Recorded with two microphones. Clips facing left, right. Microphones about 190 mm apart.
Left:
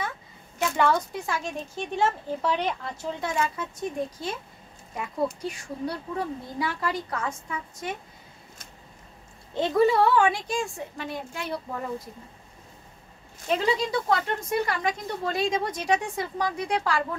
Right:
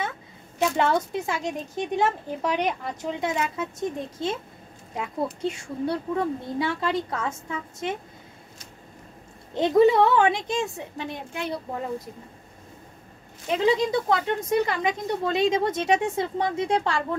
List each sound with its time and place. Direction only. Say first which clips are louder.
0.7 s a child's voice: left 2 dB; 20° right (ahead or behind)
9.5 s a child's voice: right 4 dB; 20° right (ahead or behind)
13.5 s a child's voice: right 3 dB; 20° right (ahead or behind)